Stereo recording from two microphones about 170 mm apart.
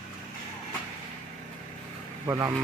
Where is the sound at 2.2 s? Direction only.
20° right (ahead or behind).